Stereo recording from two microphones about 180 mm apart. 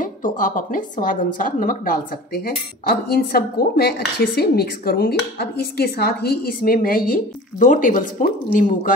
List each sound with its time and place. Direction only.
0.0 s a woman's voice: 50° left (ahead or behind)